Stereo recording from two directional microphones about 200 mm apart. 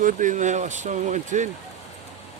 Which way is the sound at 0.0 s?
40° right (ahead or behind).